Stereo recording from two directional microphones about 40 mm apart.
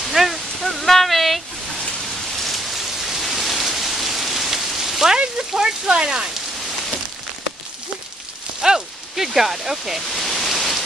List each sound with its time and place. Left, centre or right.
0.0 s a sound: centre
2.3 s rain: centre
5.5 s speech: centre
8.5 s rain on surface: centre
10.0 s pink noise: centre